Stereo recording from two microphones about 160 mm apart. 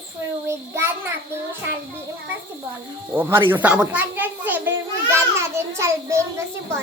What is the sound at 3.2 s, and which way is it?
A child's voice, 15° right (ahead or behind).